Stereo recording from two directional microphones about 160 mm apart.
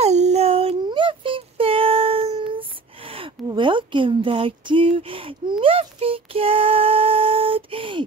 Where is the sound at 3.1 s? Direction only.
35° right (ahead or behind).